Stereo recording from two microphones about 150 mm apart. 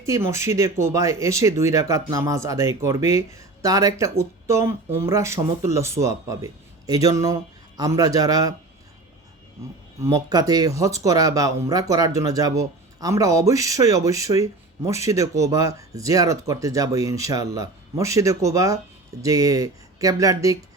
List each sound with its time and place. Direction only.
0.0 s speech: 20° right (ahead or behind)
10.0 s speech: 20° right (ahead or behind)